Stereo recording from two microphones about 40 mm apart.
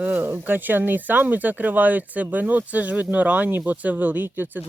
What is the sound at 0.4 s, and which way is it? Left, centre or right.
Speech, right.